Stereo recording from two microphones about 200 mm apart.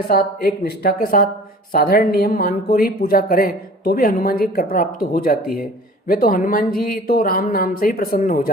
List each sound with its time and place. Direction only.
0.1 s a woman's voice: 50° left (ahead or behind)